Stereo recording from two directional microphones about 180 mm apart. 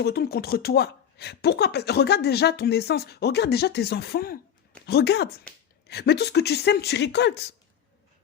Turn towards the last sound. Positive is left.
turn(degrees=70)  # may be behind; listen again after turning